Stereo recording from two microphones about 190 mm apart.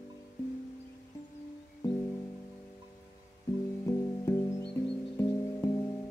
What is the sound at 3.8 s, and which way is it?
Music, 15° left (ahead or behind).